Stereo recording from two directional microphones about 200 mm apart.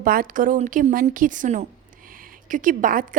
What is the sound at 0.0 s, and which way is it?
A woman's voice, 45° right (ahead or behind).